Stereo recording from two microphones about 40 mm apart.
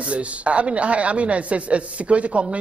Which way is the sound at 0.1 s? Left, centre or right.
Right.